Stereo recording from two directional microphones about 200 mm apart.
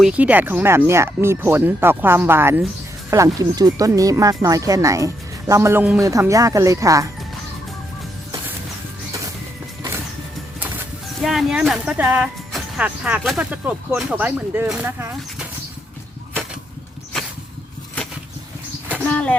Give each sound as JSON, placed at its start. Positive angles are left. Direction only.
{"t": 0.0, "sound": "speech", "side_deg": -5}
{"t": 11.2, "sound": "speech", "side_deg": 0}
{"t": 19.0, "sound": "a sound", "side_deg": 5}